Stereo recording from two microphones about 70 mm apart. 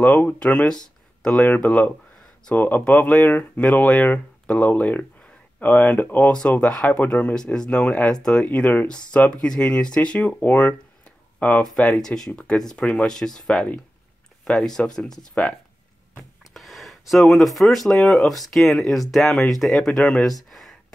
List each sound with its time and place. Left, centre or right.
0.2 s speech: centre
1.4 s speech: left
11.7 s speech: centre
16.5 s speech: centre
20.4 s a sound: centre